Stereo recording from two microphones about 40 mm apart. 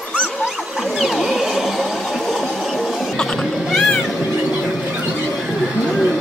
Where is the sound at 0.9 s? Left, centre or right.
Centre.